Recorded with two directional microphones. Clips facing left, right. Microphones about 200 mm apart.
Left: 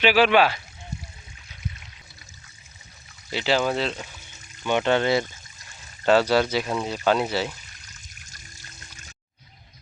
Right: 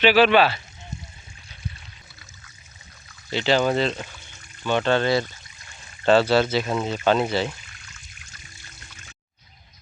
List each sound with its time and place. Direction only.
0.0 s speech: 10° left (ahead or behind)
3.2 s speech: 5° left (ahead or behind)
4.6 s speech: 15° left (ahead or behind)